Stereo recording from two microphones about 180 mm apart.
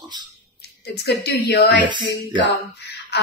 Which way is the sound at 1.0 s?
65° left (ahead or behind).